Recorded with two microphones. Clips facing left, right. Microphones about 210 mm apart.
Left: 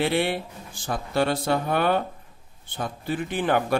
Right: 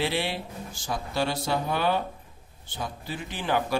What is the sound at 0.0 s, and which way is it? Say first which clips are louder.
A man's voice: left 5 dB; 55° left (ahead or behind).